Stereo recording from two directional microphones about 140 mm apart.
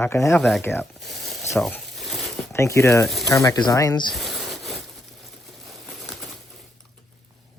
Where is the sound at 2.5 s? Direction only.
20° left (ahead or behind).